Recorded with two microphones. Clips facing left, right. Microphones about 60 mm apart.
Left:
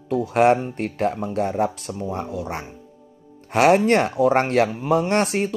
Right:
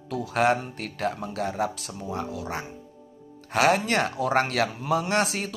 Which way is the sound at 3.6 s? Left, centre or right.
Left.